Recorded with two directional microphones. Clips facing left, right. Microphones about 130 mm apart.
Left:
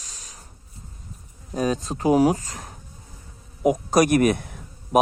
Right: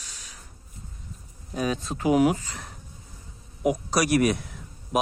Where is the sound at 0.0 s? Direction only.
40° left (ahead or behind).